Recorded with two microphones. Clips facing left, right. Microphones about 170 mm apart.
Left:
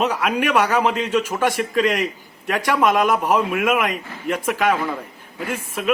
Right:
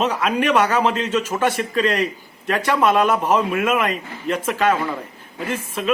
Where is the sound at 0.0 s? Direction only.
10° left (ahead or behind).